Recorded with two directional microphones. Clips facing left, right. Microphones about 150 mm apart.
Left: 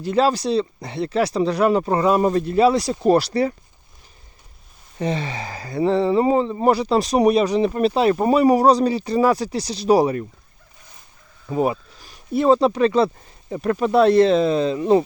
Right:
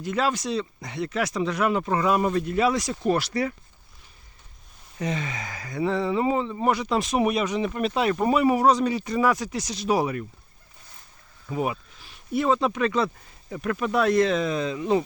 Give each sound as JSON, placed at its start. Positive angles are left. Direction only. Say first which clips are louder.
{"t": 0.0, "sound": "speech", "louder": "left 7 dB", "side_deg": 30}
{"t": 4.9, "sound": "speech", "louder": "left 5 dB", "side_deg": 30}
{"t": 11.4, "sound": "speech", "louder": "left 6 dB", "side_deg": 35}